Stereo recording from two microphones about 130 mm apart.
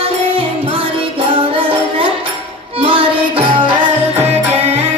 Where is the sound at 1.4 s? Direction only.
40° right (ahead or behind).